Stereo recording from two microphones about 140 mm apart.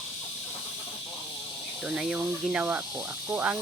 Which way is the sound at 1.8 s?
5° right (ahead or behind).